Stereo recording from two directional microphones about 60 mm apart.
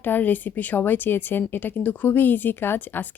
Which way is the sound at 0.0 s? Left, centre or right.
Left.